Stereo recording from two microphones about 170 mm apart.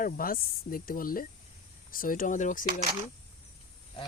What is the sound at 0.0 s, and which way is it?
Speech, 55° left (ahead or behind).